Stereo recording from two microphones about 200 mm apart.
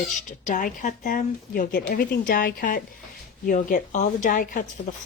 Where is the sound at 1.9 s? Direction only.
50° left (ahead or behind).